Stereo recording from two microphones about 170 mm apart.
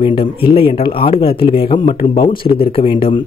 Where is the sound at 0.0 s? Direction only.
30° left (ahead or behind).